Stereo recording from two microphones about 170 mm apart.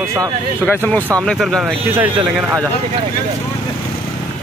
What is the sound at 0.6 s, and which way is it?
Speech, 10° left (ahead or behind).